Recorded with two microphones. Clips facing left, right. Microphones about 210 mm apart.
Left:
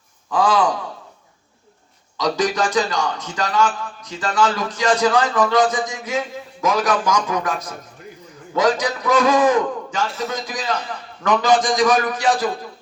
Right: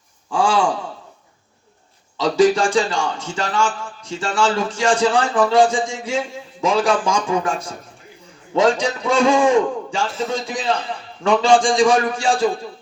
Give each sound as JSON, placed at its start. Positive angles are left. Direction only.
{"t": 0.3, "sound": "speech", "side_deg": -30}
{"t": 2.1, "sound": "a man's voice", "side_deg": -30}